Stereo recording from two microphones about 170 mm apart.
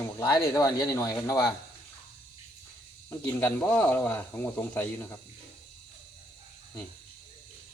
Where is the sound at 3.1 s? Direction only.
15° left (ahead or behind).